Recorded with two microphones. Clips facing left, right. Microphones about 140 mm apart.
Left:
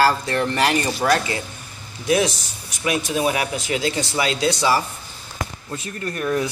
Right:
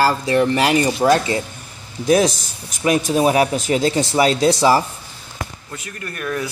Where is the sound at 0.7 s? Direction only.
20° right (ahead or behind).